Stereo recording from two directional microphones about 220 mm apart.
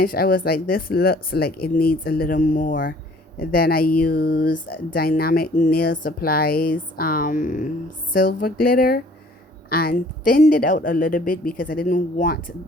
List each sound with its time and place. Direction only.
0.0 s speech: 40° left (ahead or behind)